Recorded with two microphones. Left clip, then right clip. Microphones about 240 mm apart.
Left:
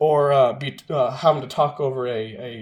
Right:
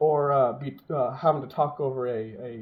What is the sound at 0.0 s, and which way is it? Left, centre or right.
Speech, left.